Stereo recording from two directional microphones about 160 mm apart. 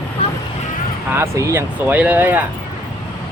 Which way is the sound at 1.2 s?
15° right (ahead or behind).